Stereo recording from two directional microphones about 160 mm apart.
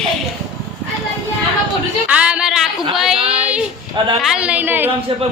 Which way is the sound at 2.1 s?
5° right (ahead or behind).